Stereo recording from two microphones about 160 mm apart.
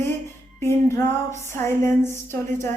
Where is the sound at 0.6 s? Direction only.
15° left (ahead or behind).